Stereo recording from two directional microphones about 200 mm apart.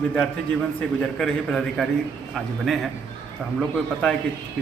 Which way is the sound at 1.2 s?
Centre (ahead or behind).